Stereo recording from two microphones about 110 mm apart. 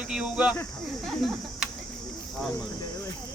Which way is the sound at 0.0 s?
10° right (ahead or behind).